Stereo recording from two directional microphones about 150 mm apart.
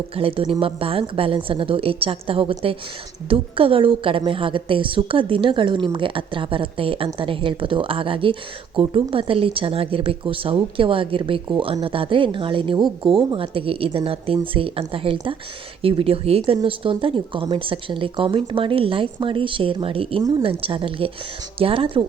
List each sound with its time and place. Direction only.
0.2 s a woman's voice: 40° right (ahead or behind)